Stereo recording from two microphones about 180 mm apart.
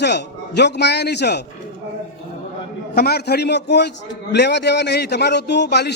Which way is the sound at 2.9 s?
60° left (ahead or behind).